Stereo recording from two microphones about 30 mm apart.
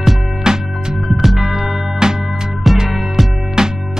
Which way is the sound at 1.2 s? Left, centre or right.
Centre.